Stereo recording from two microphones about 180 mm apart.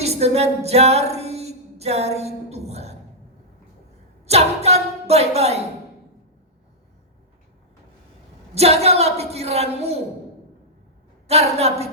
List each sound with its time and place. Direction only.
0.0 s singing: 35° right (ahead or behind)
4.3 s speech: 35° right (ahead or behind)
8.5 s a woman's voice: 35° right (ahead or behind)
11.3 s a woman's voice: 35° right (ahead or behind)